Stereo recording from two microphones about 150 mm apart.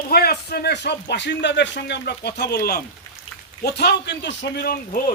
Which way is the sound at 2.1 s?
90° left.